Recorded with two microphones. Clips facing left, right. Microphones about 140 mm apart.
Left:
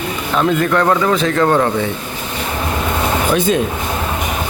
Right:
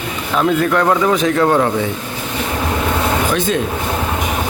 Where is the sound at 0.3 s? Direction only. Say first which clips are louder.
Even; 5° right (ahead or behind).